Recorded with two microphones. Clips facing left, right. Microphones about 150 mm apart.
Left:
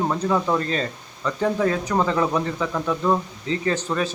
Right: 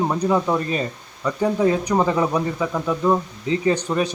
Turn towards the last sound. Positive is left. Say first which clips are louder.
# right 3 dB
turn(degrees=-15)  # may be behind; listen again after turning